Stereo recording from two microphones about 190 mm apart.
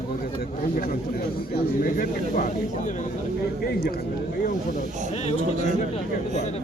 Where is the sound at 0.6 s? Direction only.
50° left (ahead or behind).